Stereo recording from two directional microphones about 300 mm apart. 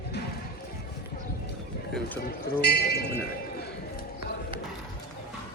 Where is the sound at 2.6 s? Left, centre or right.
Left.